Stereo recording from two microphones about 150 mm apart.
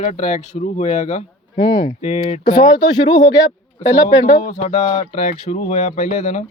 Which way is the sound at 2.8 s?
30° left (ahead or behind).